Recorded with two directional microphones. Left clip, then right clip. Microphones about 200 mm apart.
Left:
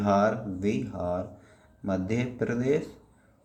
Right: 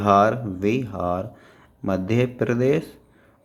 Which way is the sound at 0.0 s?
40° right (ahead or behind).